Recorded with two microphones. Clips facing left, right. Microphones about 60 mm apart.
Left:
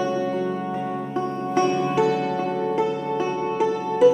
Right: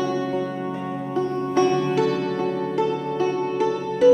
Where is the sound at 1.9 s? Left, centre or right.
Centre.